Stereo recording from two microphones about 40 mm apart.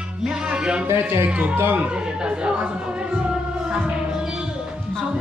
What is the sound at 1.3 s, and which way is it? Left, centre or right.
Speech, right.